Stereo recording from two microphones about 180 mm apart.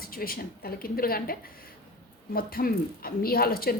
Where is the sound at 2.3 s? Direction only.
55° left (ahead or behind).